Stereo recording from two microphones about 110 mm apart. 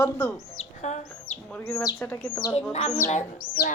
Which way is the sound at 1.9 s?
15° left (ahead or behind).